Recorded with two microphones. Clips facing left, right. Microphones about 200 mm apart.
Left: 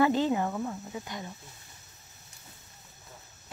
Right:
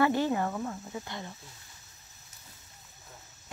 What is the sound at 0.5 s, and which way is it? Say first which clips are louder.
Speech: left 1 dB; 5° left (ahead or behind).